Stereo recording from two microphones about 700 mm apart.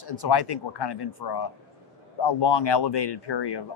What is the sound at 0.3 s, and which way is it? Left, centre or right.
Speech, left.